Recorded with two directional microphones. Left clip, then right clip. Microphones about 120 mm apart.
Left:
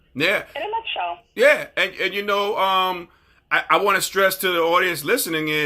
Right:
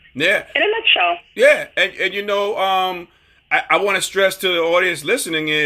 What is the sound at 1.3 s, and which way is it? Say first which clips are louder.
Speech: right 1 dB; 5° left (ahead or behind).